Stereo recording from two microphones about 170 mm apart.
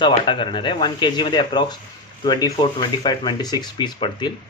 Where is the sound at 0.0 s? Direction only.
30° left (ahead or behind).